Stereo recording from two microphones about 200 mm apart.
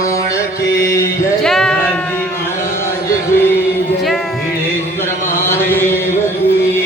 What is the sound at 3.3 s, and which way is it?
Music, 10° left (ahead or behind).